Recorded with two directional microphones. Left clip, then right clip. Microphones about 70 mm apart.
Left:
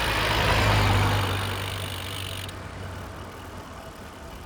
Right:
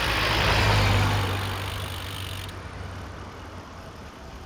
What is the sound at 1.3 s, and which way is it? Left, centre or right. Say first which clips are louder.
Vehicle: left 1 dB; right.